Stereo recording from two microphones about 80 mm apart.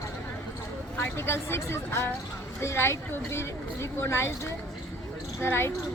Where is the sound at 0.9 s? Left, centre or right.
Left.